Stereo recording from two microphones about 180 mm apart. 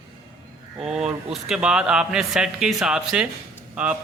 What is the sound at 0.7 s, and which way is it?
Speech, 5° right (ahead or behind).